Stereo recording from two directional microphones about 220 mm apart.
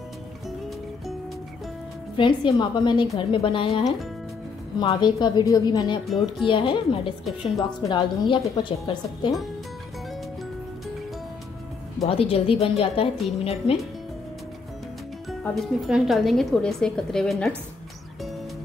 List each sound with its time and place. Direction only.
2.1 s a woman's voice: 20° left (ahead or behind)
12.0 s a woman's voice: 25° left (ahead or behind)
15.2 s speech: centre (ahead or behind)